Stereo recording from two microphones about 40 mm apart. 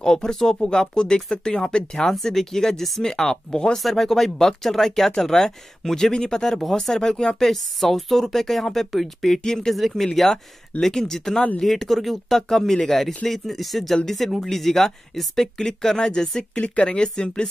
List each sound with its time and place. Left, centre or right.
0.0 s speech: centre
2.0 s speech: centre
3.7 s speech: centre
9.8 s speech: centre
16.5 s speech: left